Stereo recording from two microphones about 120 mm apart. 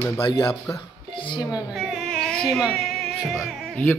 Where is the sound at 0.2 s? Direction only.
40° left (ahead or behind).